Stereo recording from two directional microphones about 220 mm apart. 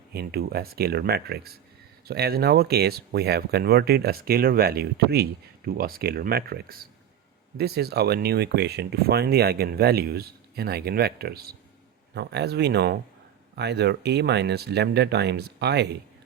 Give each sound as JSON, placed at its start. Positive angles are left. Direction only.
{"t": 0.1, "sound": "speech", "side_deg": -45}